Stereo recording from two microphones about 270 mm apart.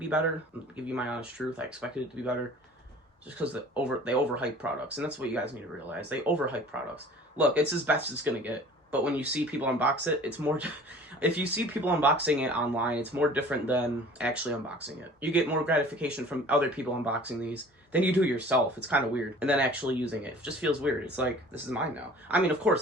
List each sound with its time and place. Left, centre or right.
0.9 s speech: centre
3.3 s speech: centre